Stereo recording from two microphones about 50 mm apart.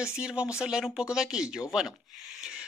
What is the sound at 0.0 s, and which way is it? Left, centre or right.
Speech, centre.